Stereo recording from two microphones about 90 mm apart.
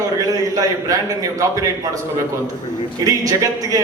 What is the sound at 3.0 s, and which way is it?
Speech, 40° right (ahead or behind).